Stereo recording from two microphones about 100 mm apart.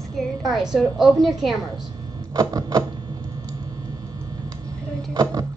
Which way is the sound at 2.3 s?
40° right (ahead or behind).